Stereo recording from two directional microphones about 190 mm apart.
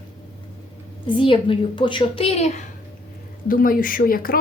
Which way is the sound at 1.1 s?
25° left (ahead or behind).